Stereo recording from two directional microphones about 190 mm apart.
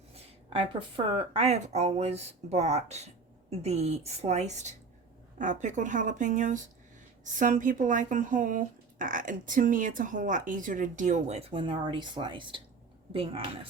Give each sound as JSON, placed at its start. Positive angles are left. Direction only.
{"t": 0.1, "sound": "speech", "side_deg": -30}